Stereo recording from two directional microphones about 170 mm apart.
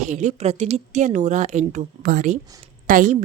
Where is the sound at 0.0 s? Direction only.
45° right (ahead or behind).